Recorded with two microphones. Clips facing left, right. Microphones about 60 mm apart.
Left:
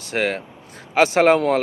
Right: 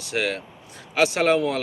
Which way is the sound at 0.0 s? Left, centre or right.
Left.